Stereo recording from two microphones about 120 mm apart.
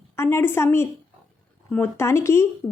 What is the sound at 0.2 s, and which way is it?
Speech, 20° left (ahead or behind).